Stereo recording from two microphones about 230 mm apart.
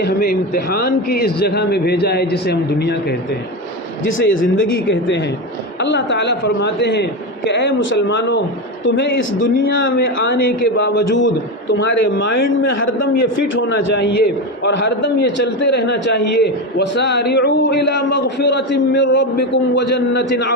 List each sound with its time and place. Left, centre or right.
0.0 s a man's voice: left
4.2 s a man's voice: left